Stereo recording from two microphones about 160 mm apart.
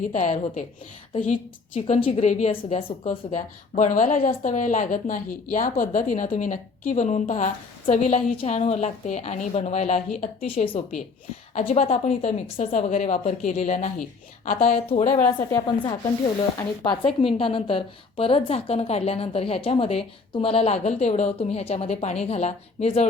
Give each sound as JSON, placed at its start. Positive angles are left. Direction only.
{"t": 0.1, "sound": "a woman's voice", "side_deg": 50}
{"t": 11.5, "sound": "speech", "side_deg": 45}
{"t": 14.4, "sound": "a woman's voice", "side_deg": 60}
{"t": 14.8, "sound": "speech", "side_deg": 45}
{"t": 15.4, "sound": "a woman's voice", "side_deg": 15}
{"t": 15.6, "sound": "a woman's voice", "side_deg": 30}